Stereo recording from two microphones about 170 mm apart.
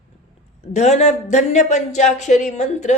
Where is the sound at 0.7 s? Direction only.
40° left (ahead or behind).